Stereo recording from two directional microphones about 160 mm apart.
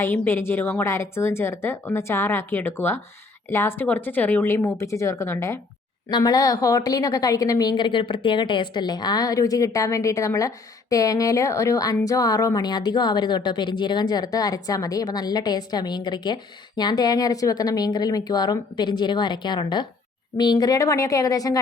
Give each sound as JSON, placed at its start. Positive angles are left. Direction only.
{"t": 0.0, "sound": "a woman's voice", "side_deg": 15}